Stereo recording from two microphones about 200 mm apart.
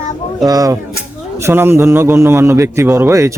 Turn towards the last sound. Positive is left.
turn(degrees=-15)  # may be behind; listen again after turning